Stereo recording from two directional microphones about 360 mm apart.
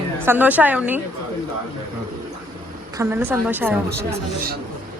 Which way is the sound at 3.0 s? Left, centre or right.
Centre.